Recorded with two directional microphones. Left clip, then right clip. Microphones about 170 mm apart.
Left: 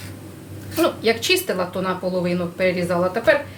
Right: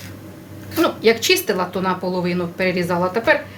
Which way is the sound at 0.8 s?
40° right (ahead or behind).